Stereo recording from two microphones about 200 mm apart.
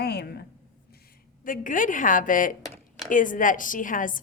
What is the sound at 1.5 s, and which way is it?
A woman's voice, 40° left (ahead or behind).